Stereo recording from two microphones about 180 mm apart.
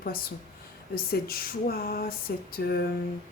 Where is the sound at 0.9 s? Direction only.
55° left (ahead or behind).